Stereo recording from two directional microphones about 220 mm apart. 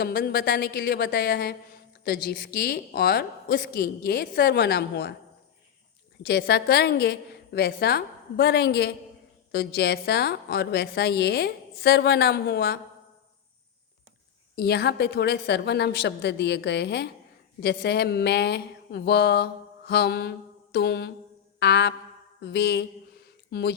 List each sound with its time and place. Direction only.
0.0 s a woman's voice: 45° left (ahead or behind)
6.2 s a woman's voice: 45° left (ahead or behind)
14.5 s a woman's voice: 45° left (ahead or behind)